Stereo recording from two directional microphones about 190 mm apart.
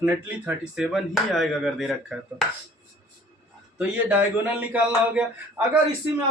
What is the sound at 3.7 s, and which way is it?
Speech, 5° right (ahead or behind).